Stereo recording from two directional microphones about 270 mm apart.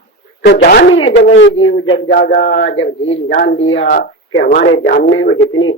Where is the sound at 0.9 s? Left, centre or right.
Left.